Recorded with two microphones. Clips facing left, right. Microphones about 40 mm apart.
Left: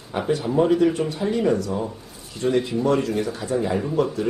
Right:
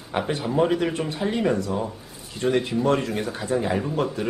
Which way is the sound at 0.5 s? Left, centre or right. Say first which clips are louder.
Left 2 dB; centre.